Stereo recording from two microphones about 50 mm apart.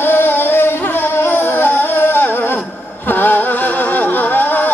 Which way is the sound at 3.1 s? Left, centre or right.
Left.